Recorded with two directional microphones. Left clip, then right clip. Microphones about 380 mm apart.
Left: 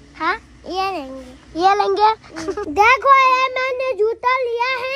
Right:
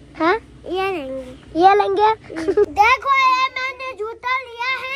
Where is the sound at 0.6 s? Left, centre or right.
Left.